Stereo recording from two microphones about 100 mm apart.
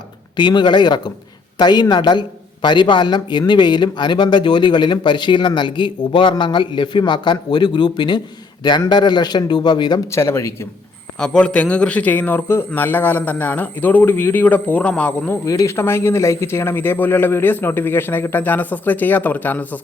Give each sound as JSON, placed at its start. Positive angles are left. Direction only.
{"t": 0.3, "sound": "a man's voice", "side_deg": 50}
{"t": 10.1, "sound": "a man's voice", "side_deg": 25}
{"t": 11.2, "sound": "a man's voice", "side_deg": 10}
{"t": 15.4, "sound": "a man's voice", "side_deg": 30}